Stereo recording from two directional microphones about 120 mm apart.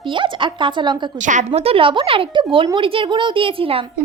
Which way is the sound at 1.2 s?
90° right.